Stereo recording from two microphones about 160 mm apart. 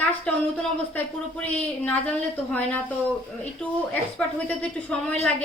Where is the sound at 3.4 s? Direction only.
10° left (ahead or behind).